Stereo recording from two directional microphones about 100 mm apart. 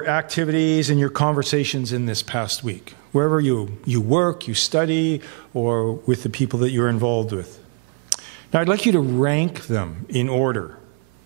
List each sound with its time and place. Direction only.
0.0 s a man's voice: 15° right (ahead or behind)
8.1 s a sound: 15° right (ahead or behind)
9.1 s a man's voice: 15° right (ahead or behind)